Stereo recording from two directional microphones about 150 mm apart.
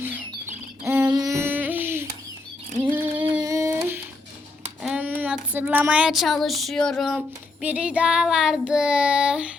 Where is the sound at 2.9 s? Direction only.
10° right (ahead or behind).